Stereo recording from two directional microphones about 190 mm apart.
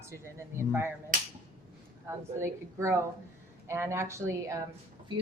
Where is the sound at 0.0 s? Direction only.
15° right (ahead or behind).